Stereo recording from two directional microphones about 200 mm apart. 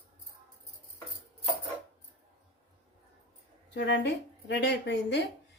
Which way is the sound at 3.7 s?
60° left (ahead or behind).